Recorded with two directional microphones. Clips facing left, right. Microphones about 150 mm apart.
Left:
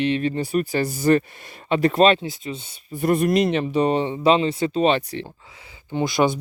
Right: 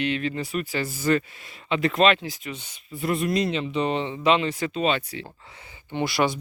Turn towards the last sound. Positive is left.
turn(degrees=10)  # may be behind; listen again after turning